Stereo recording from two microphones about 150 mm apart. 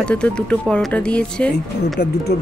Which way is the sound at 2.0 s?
90° left.